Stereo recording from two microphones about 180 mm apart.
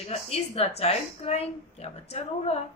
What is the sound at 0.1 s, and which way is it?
Speech, 35° left (ahead or behind).